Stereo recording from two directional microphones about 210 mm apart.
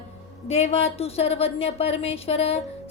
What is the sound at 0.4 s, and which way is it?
Speech, 30° left (ahead or behind).